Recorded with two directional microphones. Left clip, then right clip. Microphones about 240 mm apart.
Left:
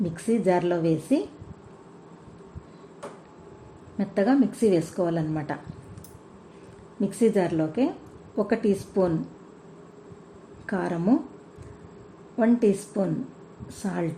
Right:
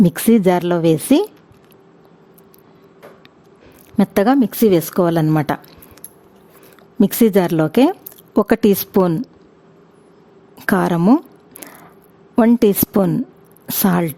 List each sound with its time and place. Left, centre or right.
0.0 s a woman's voice: right
3.9 s a woman's voice: right
7.0 s a woman's voice: right
10.7 s a woman's voice: right
12.4 s a woman's voice: right